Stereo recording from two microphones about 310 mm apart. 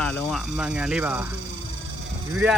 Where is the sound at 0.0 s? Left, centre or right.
Centre.